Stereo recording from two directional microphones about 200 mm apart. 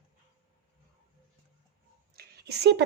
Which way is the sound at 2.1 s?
55° right (ahead or behind).